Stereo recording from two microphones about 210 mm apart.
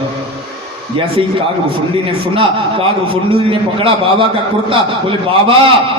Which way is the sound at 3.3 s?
25° right (ahead or behind).